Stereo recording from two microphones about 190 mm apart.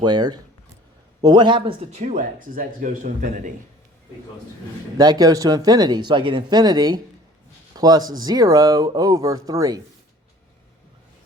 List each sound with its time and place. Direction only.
0.0 s speech: 20° right (ahead or behind); by 3.5 s 45° right (ahead or behind)
4.9 s speech: 20° right (ahead or behind)